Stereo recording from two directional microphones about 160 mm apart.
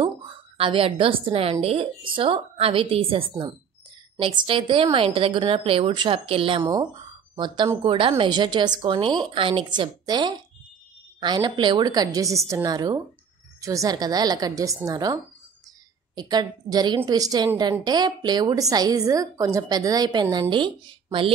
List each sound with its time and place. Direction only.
0.6 s a woman's voice: 35° right (ahead or behind)
6.6 s a woman's voice: 25° right (ahead or behind)
16.2 s a woman's voice: 25° right (ahead or behind)